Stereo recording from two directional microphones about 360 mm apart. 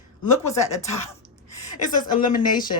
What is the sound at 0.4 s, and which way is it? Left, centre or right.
A woman's voice, centre.